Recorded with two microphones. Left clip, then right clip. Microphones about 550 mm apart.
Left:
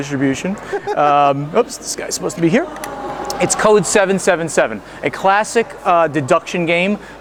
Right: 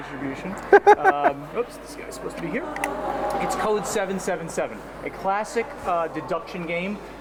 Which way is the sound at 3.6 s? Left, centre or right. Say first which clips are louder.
Left 12 dB; left.